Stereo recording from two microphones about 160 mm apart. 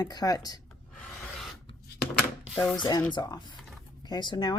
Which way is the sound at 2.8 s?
25° left (ahead or behind).